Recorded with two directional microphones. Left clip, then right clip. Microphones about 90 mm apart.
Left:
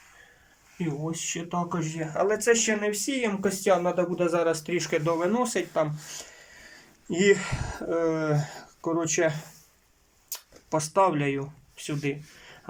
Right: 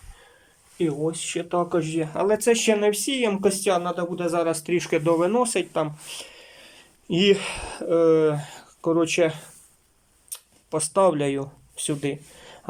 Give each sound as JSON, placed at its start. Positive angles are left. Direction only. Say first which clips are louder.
{"t": 1.1, "sound": "speech", "louder": "right 5 dB", "side_deg": -5}
{"t": 2.3, "sound": "speech", "louder": "right 5 dB", "side_deg": -30}
{"t": 3.8, "sound": "speech", "louder": "left 1 dB", "side_deg": 15}
{"t": 10.7, "sound": "speech", "louder": "even", "side_deg": -15}
{"t": 10.9, "sound": "speech", "louder": "right 4 dB", "side_deg": -35}